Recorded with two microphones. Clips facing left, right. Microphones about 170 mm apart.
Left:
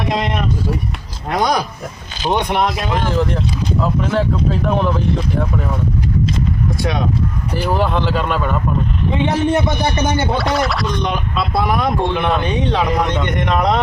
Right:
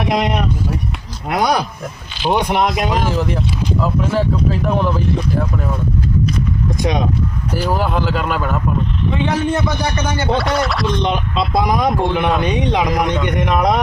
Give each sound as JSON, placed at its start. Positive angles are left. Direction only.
{"t": 0.1, "sound": "speech", "side_deg": -15}
{"t": 6.7, "sound": "speech", "side_deg": -20}
{"t": 7.5, "sound": "speech", "side_deg": -5}
{"t": 9.2, "sound": "a man's voice", "side_deg": 20}
{"t": 10.3, "sound": "speech", "side_deg": 0}
{"t": 11.0, "sound": "speech", "side_deg": -20}